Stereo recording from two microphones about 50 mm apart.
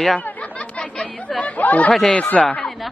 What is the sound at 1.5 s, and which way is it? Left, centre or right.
Chatter, left.